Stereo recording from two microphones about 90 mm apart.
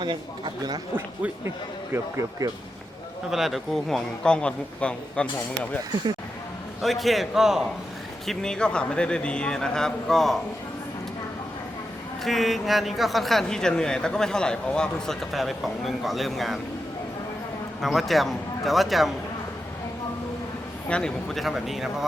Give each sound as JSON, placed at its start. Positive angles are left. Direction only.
{"t": 0.0, "sound": "speech", "side_deg": -60}
{"t": 2.4, "sound": "speech", "side_deg": -45}
{"t": 3.2, "sound": "a man's voice", "side_deg": -5}
{"t": 6.8, "sound": "a man's voice", "side_deg": 0}
{"t": 8.3, "sound": "a man's voice", "side_deg": 5}
{"t": 12.2, "sound": "a man's voice", "side_deg": 0}
{"t": 17.7, "sound": "a man's voice", "side_deg": 0}
{"t": 20.9, "sound": "a man's voice", "side_deg": 5}